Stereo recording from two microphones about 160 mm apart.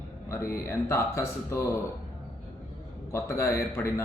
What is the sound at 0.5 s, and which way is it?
Speech, 15° left (ahead or behind).